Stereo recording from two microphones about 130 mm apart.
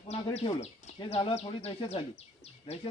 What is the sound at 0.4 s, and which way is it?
Speech, 40° left (ahead or behind).